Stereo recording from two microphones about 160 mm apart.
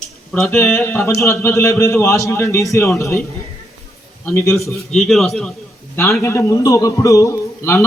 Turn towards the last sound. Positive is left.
turn(degrees=15)  # may be behind; listen again after turning